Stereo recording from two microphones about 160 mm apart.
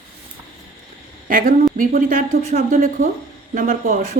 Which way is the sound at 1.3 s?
60° right (ahead or behind).